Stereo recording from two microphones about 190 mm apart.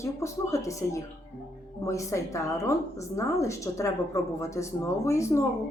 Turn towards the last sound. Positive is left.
turn(degrees=15)  # may be behind; listen again after turning